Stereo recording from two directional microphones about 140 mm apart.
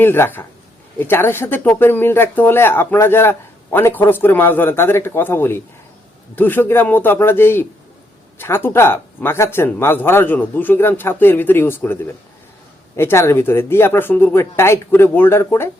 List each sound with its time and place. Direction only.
0.0 s speech: 15° left (ahead or behind)
13.0 s speech: 20° left (ahead or behind)